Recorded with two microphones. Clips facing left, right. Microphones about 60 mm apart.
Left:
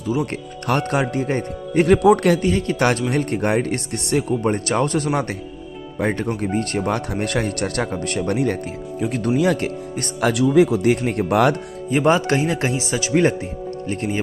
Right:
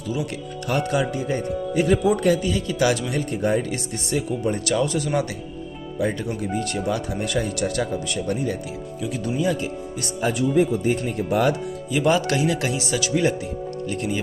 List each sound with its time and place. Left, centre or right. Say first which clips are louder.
0.7 s speech: left 2 dB; left
4.1 s speech: left 4 dB; left
9.3 s speech: left 5 dB; left
10.2 s speech: left 5 dB; left
11.9 s speech: left 3 dB; left